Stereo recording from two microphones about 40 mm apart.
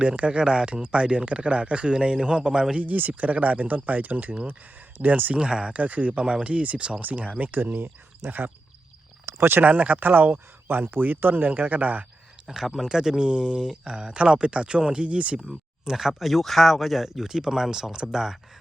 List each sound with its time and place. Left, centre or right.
0.0 s speech: right
2.8 s speech: right
5.3 s speech: right
5.7 s speech: right
6.2 s speech: right
7.5 s speech: right
9.6 s speech: right
11.4 s speech: right
12.5 s speech: centre; by 15.2 s right
15.8 s speech: centre